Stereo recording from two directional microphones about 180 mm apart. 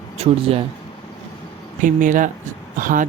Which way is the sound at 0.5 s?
35° right (ahead or behind).